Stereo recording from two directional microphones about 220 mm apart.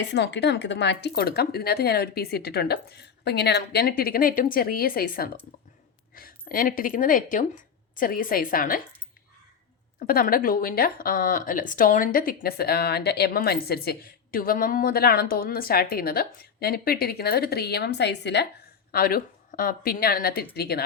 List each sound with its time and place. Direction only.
0.0 s a woman's voice: 50° left (ahead or behind)
10.1 s a woman's voice: 40° left (ahead or behind)